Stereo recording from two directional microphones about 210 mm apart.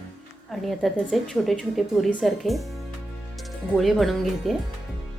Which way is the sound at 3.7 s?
Centre (ahead or behind).